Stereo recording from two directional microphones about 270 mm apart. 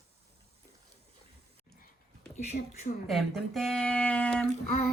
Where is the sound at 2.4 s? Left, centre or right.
Left.